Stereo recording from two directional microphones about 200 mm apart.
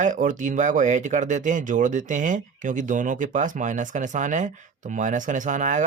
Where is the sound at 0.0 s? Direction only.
40° right (ahead or behind).